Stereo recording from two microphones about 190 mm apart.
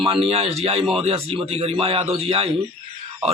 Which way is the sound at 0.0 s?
30° right (ahead or behind).